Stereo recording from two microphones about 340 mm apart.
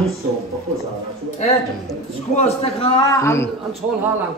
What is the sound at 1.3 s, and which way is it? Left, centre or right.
A man's voice, centre.